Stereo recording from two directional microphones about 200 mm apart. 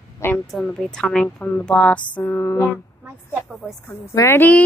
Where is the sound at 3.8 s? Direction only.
15° left (ahead or behind).